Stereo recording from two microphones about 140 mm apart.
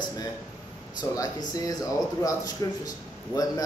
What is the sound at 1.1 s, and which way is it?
Speech, 25° left (ahead or behind).